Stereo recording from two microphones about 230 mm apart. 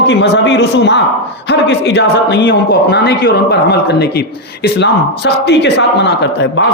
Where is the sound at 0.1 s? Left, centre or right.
Left.